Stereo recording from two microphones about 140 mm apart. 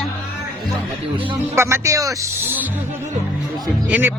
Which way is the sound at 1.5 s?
20° right (ahead or behind).